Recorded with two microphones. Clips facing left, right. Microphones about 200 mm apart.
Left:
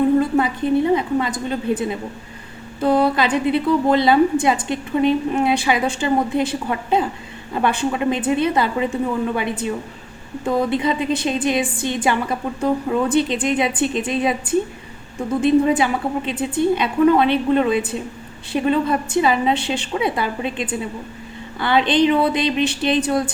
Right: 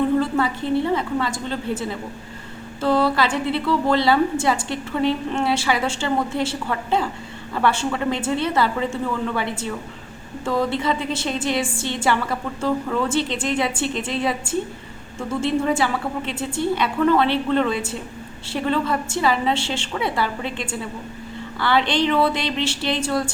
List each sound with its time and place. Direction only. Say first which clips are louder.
0.2 s a woman's voice: left 3 dB; 20° left (ahead or behind)